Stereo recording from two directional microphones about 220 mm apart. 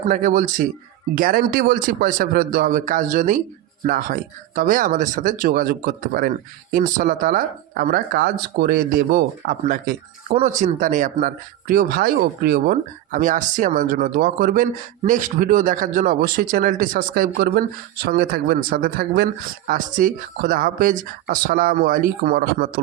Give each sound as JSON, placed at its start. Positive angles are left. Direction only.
{"t": 0.1, "sound": "speech", "side_deg": -40}